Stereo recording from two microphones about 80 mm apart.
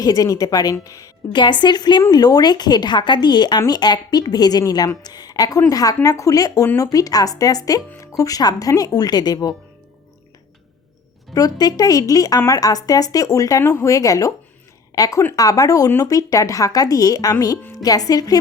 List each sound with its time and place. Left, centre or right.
0.0 s speech: left
1.3 s a woman's voice: left
11.3 s speech: left
13.6 s speech: left